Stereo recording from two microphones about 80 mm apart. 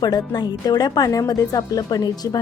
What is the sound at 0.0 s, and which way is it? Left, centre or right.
Speech, left.